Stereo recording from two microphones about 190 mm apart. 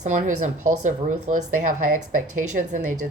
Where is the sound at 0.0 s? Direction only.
40° right (ahead or behind).